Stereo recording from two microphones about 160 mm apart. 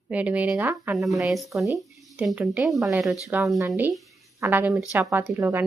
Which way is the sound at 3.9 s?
Centre (ahead or behind).